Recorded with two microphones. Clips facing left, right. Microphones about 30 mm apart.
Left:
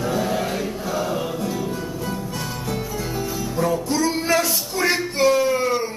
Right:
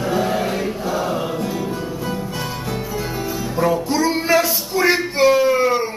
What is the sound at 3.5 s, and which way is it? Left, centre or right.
Music, centre.